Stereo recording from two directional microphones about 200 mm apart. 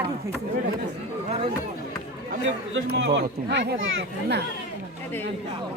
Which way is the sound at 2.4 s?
60° right (ahead or behind).